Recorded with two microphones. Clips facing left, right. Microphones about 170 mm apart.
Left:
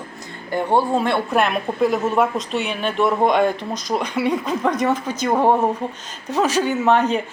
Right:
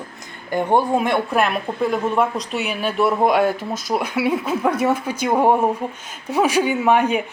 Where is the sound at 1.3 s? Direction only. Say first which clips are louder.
Left 1 dB; centre (ahead or behind).